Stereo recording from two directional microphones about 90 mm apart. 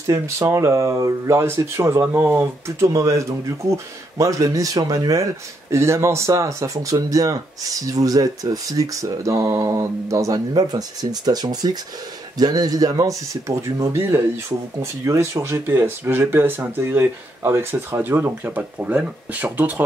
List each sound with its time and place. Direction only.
0.0 s speech: 40° right (ahead or behind); by 19.7 s 20° right (ahead or behind)